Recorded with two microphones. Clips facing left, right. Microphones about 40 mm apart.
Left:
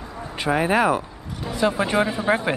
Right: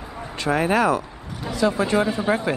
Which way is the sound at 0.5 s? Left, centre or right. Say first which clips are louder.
Even; centre.